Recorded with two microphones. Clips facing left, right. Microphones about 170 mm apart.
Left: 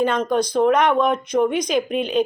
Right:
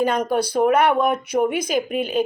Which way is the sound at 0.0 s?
10° right (ahead or behind).